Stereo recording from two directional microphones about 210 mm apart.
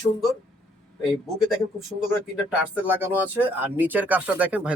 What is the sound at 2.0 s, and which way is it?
Speech, 5° right (ahead or behind).